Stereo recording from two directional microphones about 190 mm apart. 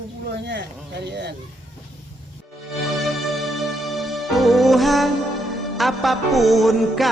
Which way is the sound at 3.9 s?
Centre (ahead or behind).